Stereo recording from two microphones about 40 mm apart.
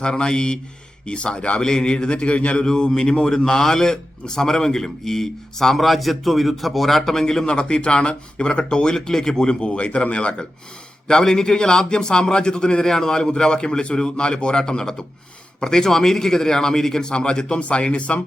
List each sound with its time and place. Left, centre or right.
0.0 s a man's voice: left
2.6 s a man's voice: centre
11.1 s a man's voice: centre; by 18.2 s left